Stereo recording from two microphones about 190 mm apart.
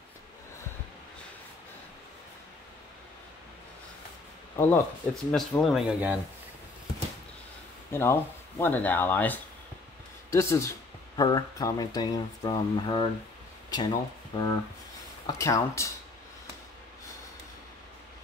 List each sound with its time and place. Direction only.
4.6 s speech: 5° left (ahead or behind)
7.9 s speech: 10° left (ahead or behind)